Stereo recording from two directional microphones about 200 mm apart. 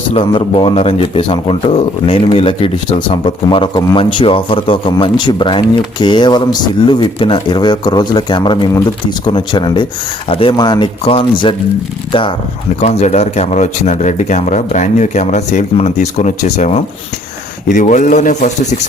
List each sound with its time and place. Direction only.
0.1 s speech: 25° left (ahead or behind)